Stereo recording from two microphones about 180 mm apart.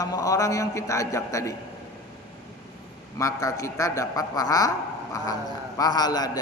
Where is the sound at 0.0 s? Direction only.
20° left (ahead or behind).